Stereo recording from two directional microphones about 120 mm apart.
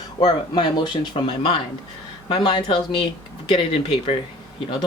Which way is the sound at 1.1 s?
45° left (ahead or behind).